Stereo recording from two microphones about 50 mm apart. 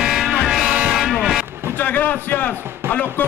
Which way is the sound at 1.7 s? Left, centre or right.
Left.